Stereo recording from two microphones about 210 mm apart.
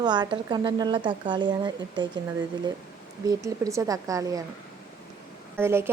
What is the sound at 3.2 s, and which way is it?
A woman's voice, 15° right (ahead or behind).